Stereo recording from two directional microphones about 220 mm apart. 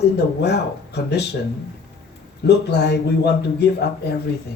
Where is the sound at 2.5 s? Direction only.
50° left (ahead or behind).